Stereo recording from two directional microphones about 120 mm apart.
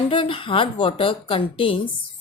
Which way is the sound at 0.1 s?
45° left (ahead or behind).